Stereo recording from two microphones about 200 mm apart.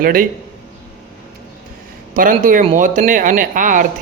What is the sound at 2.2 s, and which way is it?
A man's voice, 40° right (ahead or behind).